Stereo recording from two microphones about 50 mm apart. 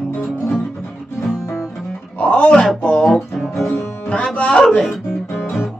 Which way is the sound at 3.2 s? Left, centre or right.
Centre.